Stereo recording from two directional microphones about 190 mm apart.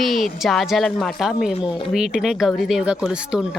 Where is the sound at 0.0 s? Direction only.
Centre (ahead or behind).